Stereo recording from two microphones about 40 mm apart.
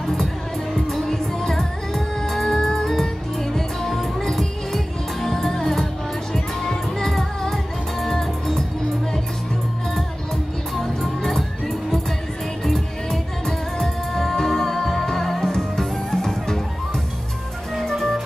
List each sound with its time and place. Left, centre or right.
0.0 s music: centre
17.9 s music: centre